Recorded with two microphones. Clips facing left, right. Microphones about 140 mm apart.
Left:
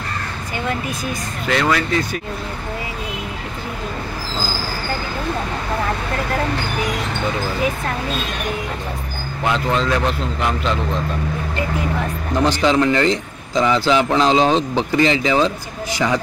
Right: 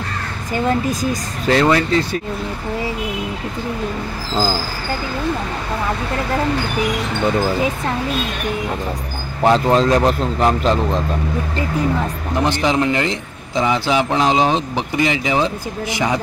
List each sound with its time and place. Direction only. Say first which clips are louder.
1.5 s speech: right 4 dB; 30° right (ahead or behind)
9.4 s a man's voice: right 6 dB; 35° right (ahead or behind)
12.4 s a man's voice: left 2 dB; 20° right (ahead or behind)